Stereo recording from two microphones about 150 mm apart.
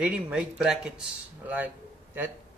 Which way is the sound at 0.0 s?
5° right (ahead or behind).